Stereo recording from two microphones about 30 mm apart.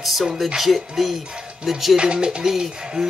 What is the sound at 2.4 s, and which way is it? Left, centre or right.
Speech, centre.